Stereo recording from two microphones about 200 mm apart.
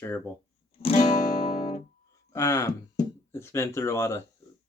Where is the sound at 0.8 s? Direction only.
30° left (ahead or behind).